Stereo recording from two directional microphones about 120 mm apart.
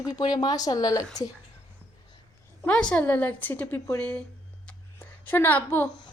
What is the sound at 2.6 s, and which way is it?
A woman's voice, 5° left (ahead or behind).